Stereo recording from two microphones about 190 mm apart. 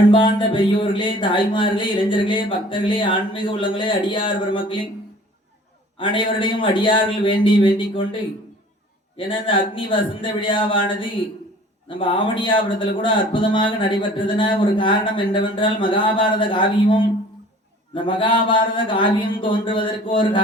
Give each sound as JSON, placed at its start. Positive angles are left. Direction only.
{"t": 0.1, "sound": "speech", "side_deg": 25}
{"t": 6.0, "sound": "speech", "side_deg": 25}